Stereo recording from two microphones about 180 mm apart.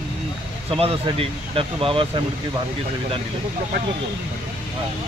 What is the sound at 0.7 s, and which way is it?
Speech, 30° right (ahead or behind).